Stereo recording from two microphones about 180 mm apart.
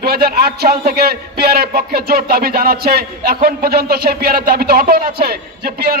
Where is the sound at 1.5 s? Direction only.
60° right (ahead or behind).